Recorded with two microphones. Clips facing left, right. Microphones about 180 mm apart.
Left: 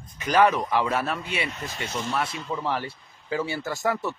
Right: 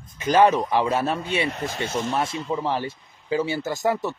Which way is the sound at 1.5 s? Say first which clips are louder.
Right 6 dB; 45° right (ahead or behind).